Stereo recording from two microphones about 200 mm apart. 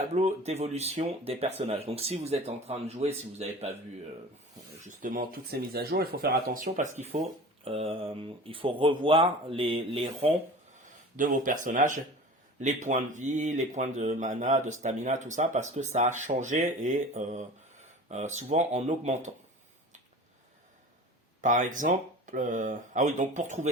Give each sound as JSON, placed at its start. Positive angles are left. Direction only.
{"t": 0.0, "sound": "speech", "side_deg": -35}
{"t": 4.8, "sound": "speech", "side_deg": -40}
{"t": 10.8, "sound": "speech", "side_deg": -40}
{"t": 21.4, "sound": "speech", "side_deg": -40}